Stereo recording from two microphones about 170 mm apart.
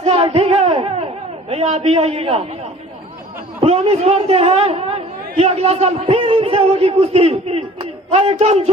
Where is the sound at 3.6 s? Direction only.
35° right (ahead or behind).